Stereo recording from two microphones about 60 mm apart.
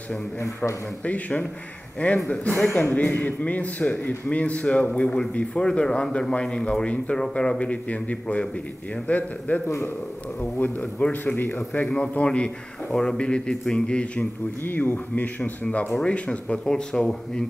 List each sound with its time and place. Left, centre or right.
1.0 s a man's voice: left
11.3 s speech: left
12.0 s a man's voice: left
14.6 s a man's voice: left; by 17.5 s centre